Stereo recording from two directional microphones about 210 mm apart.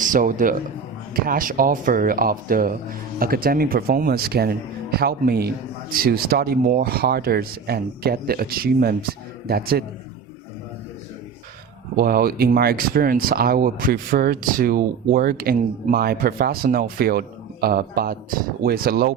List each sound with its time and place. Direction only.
0.0 s a man's voice: 40° right (ahead or behind)
11.9 s speech: 45° right (ahead or behind)